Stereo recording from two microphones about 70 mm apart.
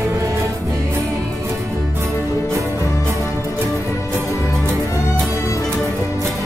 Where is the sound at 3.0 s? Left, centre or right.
Right.